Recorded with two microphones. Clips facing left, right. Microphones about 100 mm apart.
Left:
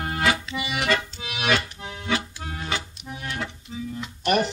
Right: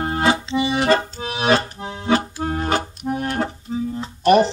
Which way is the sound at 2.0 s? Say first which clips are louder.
Right 9 dB; 40° right (ahead or behind).